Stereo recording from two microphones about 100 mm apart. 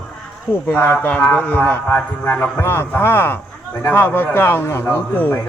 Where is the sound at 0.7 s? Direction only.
20° left (ahead or behind).